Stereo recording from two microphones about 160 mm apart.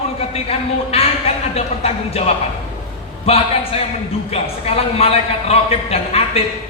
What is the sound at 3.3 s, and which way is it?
A man's voice, 35° left (ahead or behind).